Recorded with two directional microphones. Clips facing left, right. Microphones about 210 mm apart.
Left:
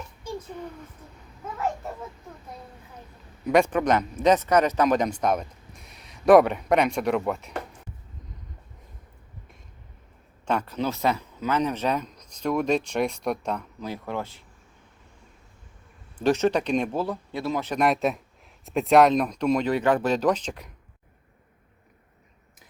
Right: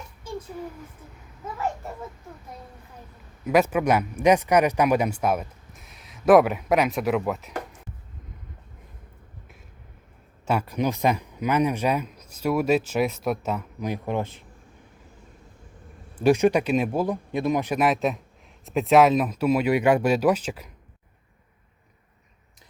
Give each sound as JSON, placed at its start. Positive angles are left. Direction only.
{"t": 3.4, "sound": "speech", "side_deg": -5}
{"t": 10.4, "sound": "speech", "side_deg": -10}
{"t": 13.8, "sound": "speech", "side_deg": -15}
{"t": 16.1, "sound": "speech", "side_deg": -10}
{"t": 17.7, "sound": "speech", "side_deg": 0}